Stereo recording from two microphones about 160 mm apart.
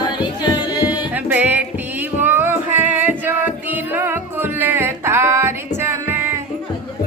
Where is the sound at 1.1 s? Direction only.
10° right (ahead or behind).